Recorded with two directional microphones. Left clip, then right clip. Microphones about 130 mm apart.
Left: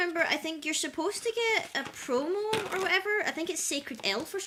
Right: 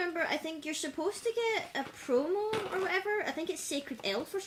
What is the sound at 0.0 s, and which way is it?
Speech, 20° left (ahead or behind).